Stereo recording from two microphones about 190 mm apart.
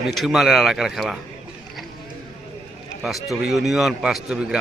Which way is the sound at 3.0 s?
Centre (ahead or behind).